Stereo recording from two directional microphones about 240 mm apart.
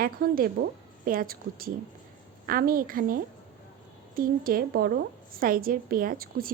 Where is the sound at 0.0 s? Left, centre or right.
Right.